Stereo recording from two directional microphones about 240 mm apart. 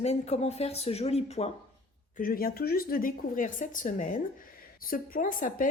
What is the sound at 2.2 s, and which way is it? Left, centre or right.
A woman's voice, left.